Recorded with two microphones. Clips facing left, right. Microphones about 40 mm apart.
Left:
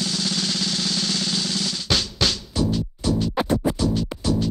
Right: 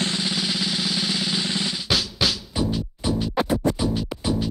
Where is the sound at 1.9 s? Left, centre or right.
Centre.